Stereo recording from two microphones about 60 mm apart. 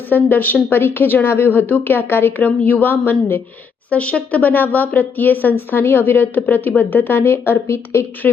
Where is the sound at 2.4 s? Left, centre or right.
Left.